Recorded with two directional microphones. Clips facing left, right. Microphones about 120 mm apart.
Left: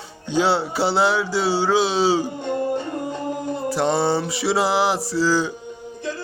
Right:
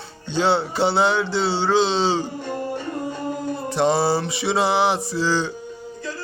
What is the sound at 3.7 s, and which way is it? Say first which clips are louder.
Music: right 1 dB; centre (ahead or behind).